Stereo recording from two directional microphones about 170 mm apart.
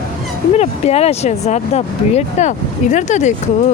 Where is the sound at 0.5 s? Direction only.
40° left (ahead or behind).